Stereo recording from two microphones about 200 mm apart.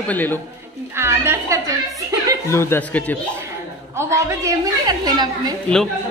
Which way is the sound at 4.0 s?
15° right (ahead or behind).